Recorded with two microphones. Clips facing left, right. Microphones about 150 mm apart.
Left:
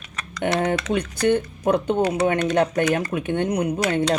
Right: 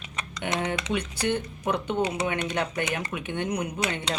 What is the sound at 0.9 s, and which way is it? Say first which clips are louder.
Speech: left 8 dB; 45° left (ahead or behind).